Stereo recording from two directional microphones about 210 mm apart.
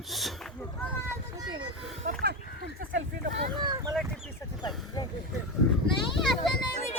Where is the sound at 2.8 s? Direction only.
40° right (ahead or behind).